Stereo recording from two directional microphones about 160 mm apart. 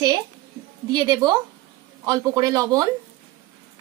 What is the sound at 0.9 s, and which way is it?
Speech, 25° right (ahead or behind).